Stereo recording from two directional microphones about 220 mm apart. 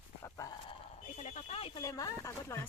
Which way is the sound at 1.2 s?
25° left (ahead or behind).